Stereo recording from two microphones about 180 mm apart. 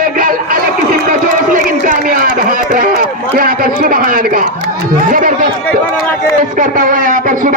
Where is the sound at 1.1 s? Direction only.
50° right (ahead or behind).